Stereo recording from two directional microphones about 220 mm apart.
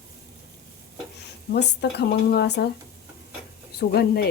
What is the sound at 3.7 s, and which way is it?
Speech, 45° left (ahead or behind).